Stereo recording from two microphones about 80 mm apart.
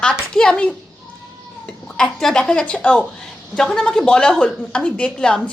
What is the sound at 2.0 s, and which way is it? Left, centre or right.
A woman's voice, centre.